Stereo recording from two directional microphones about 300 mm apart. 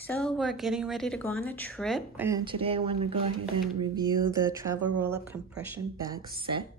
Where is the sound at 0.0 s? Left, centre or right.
Centre.